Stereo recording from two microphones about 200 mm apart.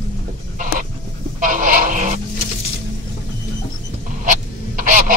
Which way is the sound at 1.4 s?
40° right (ahead or behind).